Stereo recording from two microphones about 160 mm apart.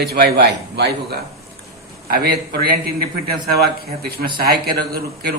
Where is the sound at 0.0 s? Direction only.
85° right.